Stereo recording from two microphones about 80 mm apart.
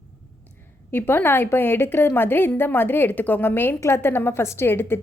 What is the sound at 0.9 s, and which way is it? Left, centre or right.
A woman's voice, left.